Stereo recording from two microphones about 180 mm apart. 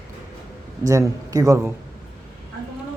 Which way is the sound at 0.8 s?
20° right (ahead or behind).